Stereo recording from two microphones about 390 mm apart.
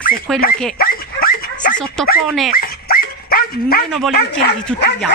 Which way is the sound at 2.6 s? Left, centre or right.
Left.